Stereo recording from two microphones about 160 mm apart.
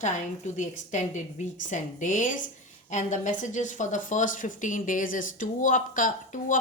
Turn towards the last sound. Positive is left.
turn(degrees=55)  # may be behind; listen again after turning